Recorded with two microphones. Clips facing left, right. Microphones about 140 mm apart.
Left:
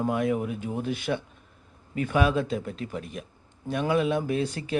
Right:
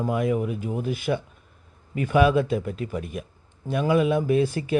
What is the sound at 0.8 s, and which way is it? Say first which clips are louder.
Speech: right 2 dB; 45° right (ahead or behind).